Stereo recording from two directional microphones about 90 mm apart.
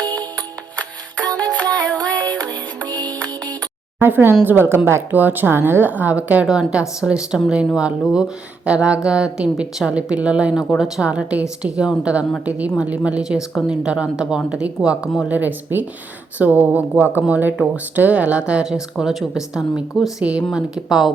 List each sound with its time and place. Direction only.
1.4 s music: 15° left (ahead or behind)
4.0 s speech: 25° right (ahead or behind); by 21.1 s 5° right (ahead or behind)